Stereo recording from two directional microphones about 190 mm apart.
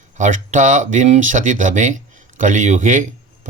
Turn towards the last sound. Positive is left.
turn(degrees=-40)  # may be behind; listen again after turning